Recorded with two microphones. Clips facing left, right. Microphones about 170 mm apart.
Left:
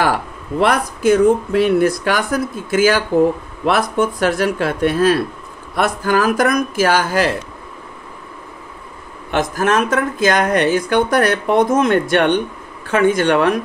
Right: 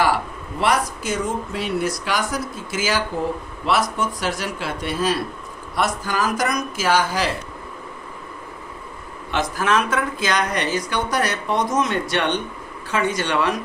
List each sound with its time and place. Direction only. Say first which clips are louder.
0.6 s speech: left 4 dB; 55° left (ahead or behind)
9.3 s speech: left 4 dB; 50° left (ahead or behind)